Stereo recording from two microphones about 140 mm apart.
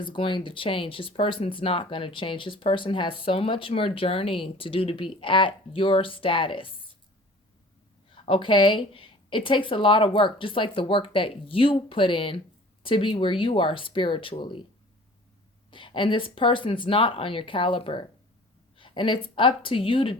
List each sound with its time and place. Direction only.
0.0 s speech: 35° left (ahead or behind)
8.1 s speech: 40° left (ahead or behind)
15.7 s speech: 35° left (ahead or behind)